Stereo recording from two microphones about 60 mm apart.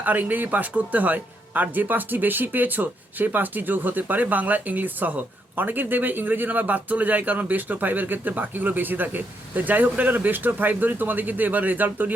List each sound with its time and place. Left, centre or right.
0.0 s speech: right